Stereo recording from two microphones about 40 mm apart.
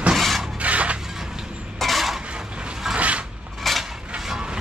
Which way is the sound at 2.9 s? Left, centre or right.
Right.